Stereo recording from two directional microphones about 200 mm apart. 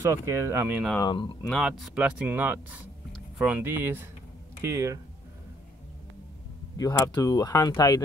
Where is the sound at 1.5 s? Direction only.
Centre (ahead or behind); by 4.9 s 15° right (ahead or behind).